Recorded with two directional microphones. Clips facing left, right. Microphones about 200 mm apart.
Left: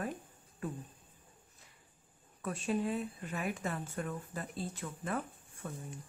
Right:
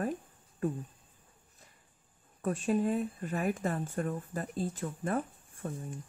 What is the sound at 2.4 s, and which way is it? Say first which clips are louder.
Speech: right 5 dB; 45° right (ahead or behind).